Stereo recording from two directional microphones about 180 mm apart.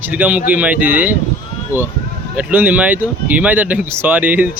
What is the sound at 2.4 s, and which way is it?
Speech, 10° right (ahead or behind).